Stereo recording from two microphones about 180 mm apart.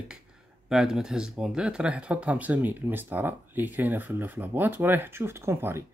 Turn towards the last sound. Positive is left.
turn(degrees=-15)  # may be behind; listen again after turning